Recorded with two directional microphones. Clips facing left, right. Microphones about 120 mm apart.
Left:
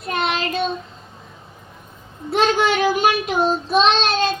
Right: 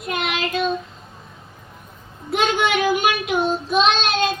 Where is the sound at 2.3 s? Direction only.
35° left (ahead or behind).